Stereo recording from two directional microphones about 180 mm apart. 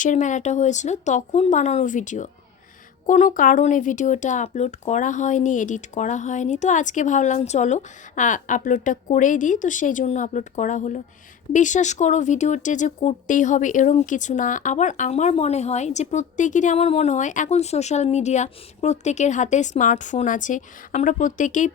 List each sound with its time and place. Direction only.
0.0 s speech: 45° left (ahead or behind)